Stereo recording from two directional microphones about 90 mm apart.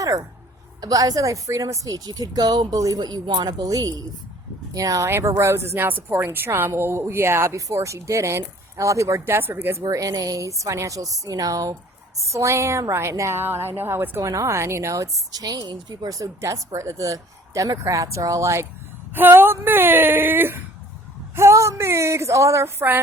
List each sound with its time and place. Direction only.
0.8 s a woman's voice: 45° right (ahead or behind); by 9.8 s 25° right (ahead or behind)
9.9 s a woman's voice: 40° right (ahead or behind)
14.2 s a woman's voice: 35° right (ahead or behind)
19.1 s a woman's voice: 25° right (ahead or behind)